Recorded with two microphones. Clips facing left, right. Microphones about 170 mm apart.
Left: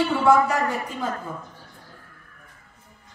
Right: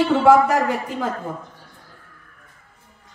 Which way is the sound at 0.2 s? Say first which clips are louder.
Right 3 dB; 70° right (ahead or behind).